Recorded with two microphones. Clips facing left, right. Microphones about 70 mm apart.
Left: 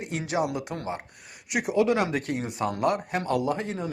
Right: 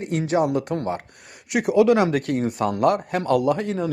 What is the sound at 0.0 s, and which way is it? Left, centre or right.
Speech, right.